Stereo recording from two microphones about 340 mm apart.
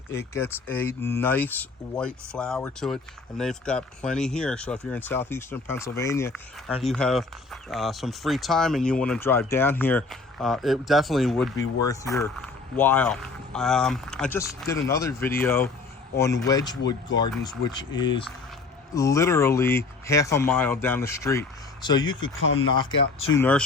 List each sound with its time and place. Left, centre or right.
0.1 s speech: centre
22.4 s speech: left
22.7 s speech: centre